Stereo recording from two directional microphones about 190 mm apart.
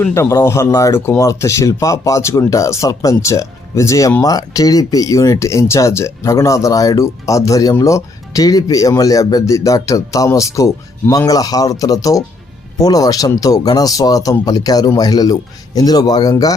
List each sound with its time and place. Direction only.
0.0 s speech: 15° left (ahead or behind)